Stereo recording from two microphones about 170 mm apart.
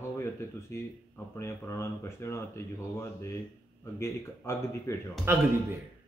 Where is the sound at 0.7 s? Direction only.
15° left (ahead or behind).